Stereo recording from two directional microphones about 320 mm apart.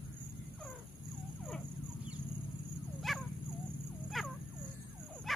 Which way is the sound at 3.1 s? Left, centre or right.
Centre.